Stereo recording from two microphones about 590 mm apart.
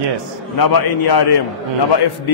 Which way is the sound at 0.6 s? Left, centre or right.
Left.